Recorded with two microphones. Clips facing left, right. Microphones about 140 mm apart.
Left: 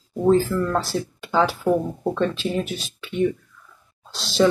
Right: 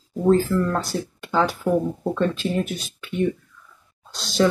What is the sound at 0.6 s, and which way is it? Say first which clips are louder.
Speech: left 1 dB; centre (ahead or behind).